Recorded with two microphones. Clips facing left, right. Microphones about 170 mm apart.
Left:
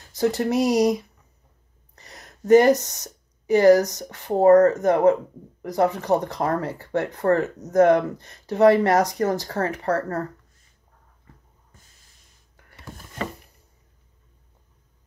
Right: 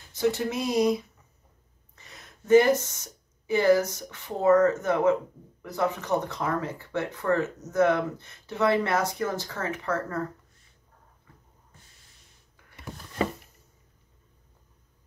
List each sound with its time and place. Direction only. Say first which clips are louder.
0.1 s speech: left 5 dB; 40° left (ahead or behind)
2.0 s a sound: left 5 dB; 40° left (ahead or behind)
4.1 s speech: left 7 dB; 40° left (ahead or behind)